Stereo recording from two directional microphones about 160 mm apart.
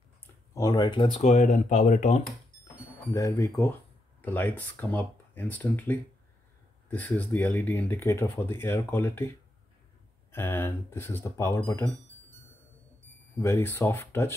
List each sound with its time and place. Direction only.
0.6 s speech: 25° left (ahead or behind)
1.1 s speech: 45° left (ahead or behind)
3.1 s speech: 20° left (ahead or behind)
10.3 s speech: 15° left (ahead or behind)
13.4 s speech: 15° left (ahead or behind)